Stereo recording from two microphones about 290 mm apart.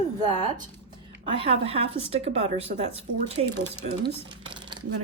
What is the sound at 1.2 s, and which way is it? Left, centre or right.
A woman's voice, centre.